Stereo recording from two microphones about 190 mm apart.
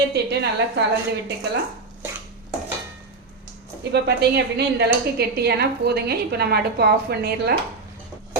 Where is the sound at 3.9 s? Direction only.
60° right (ahead or behind).